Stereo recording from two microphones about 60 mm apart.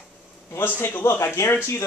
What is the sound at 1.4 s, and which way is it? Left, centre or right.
Speech, left.